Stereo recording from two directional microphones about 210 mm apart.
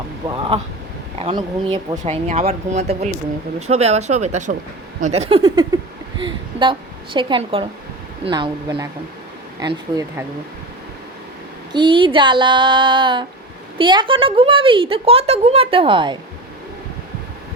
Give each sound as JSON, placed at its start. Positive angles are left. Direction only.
{"t": 0.2, "sound": "a woman's voice", "side_deg": -20}
{"t": 11.7, "sound": "a woman's voice", "side_deg": -20}